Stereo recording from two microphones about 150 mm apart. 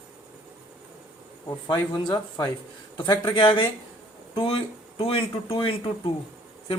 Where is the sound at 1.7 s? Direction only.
30° left (ahead or behind).